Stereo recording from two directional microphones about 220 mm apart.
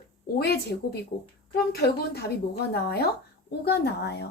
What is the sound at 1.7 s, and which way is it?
A woman's voice, 45° left (ahead or behind).